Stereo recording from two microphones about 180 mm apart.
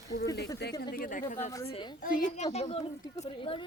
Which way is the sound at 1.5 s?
15° left (ahead or behind).